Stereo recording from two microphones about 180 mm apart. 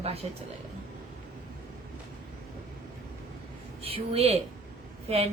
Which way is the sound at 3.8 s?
30° right (ahead or behind).